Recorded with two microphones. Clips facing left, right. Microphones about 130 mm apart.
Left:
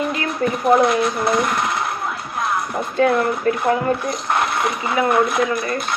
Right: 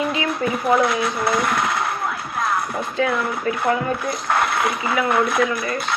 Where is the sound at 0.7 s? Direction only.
45° left (ahead or behind).